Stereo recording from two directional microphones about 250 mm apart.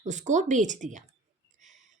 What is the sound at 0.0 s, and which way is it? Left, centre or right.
A woman's voice, right.